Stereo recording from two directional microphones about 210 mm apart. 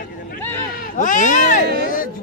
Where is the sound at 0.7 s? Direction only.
40° left (ahead or behind).